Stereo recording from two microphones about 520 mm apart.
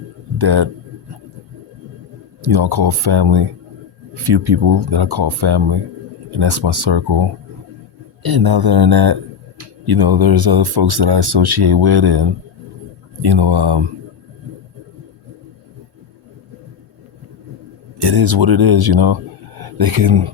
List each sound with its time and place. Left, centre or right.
0.3 s a man's voice: right
2.4 s speech: right
13.2 s speech: right
18.0 s speech: right